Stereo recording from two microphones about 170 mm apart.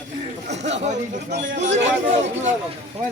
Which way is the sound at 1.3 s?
90° right.